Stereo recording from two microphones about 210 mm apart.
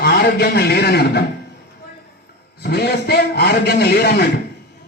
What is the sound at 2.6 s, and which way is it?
A man's voice, 50° left (ahead or behind).